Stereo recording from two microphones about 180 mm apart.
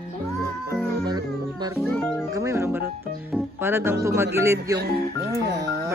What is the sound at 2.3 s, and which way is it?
Music, 15° right (ahead or behind).